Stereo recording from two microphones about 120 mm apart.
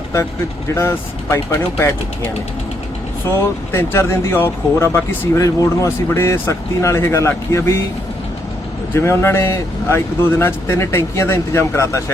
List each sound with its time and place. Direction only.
0.7 s speech: 25° left (ahead or behind)
3.2 s speech: 20° left (ahead or behind)
8.9 s speech: 20° left (ahead or behind)